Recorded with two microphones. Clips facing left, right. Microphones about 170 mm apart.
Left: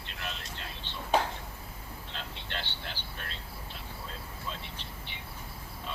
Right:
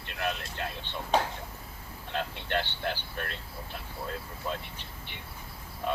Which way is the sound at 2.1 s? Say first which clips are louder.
Right 10 dB; 55° right (ahead or behind).